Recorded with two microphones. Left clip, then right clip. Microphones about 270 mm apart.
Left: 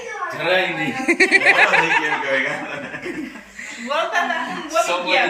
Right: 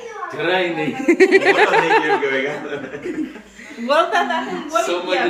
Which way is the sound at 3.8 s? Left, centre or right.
Right.